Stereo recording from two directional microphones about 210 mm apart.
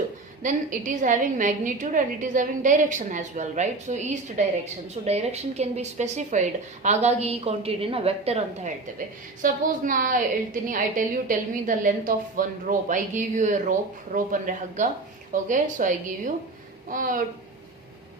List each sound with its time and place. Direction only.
0.4 s a woman's voice: 35° right (ahead or behind)
9.4 s a woman's voice: 40° right (ahead or behind)